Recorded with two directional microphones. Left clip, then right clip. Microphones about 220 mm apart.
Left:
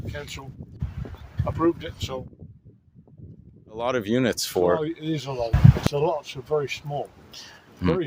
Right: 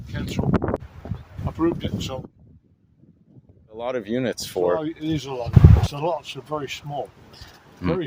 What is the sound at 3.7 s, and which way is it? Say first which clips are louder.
Speech: left 2 dB; 20° left (ahead or behind).